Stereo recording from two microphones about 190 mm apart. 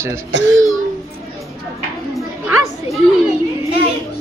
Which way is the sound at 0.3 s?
70° right (ahead or behind).